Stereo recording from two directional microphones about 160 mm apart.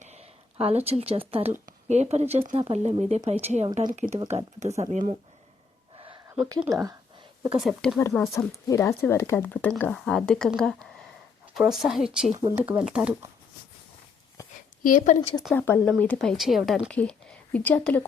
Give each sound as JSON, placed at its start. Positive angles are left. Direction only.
{"t": 0.0, "sound": "speech", "side_deg": -45}
{"t": 6.2, "sound": "a sound", "side_deg": -5}
{"t": 7.6, "sound": "a woman's voice", "side_deg": 0}
{"t": 7.9, "sound": "a woman's voice", "side_deg": 15}
{"t": 12.4, "sound": "speech", "side_deg": -20}
{"t": 12.6, "sound": "speech", "side_deg": -10}
{"t": 14.8, "sound": "speech", "side_deg": 55}
{"t": 15.5, "sound": "a woman's voice", "side_deg": 15}